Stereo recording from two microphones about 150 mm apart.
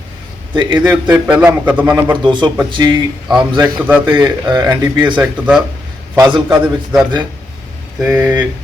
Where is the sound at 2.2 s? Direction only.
30° right (ahead or behind).